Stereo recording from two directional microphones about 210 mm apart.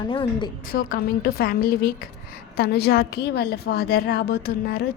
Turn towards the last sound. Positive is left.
turn(degrees=45)  # may be behind; listen again after turning